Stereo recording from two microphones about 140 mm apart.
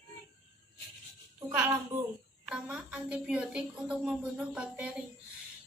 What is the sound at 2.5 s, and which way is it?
A woman's voice, 5° right (ahead or behind).